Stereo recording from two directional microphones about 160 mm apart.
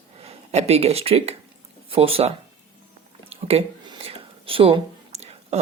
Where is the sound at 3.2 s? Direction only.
40° right (ahead or behind).